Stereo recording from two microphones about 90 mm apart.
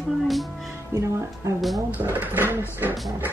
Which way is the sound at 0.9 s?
30° right (ahead or behind).